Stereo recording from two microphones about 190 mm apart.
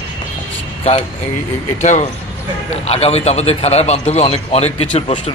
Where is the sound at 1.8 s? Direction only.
40° left (ahead or behind).